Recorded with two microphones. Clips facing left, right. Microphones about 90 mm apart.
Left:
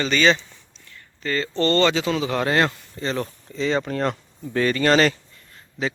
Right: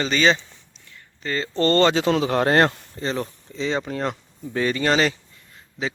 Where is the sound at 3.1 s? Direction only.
15° right (ahead or behind).